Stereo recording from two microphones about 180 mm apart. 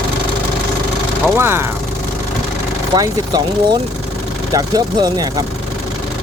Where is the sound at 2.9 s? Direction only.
20° right (ahead or behind).